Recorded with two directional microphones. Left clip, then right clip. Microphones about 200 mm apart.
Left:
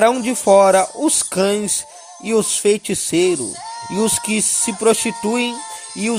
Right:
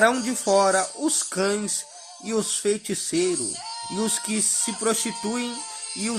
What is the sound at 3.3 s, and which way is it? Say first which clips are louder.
Speech: left 6 dB; 20° left (ahead or behind).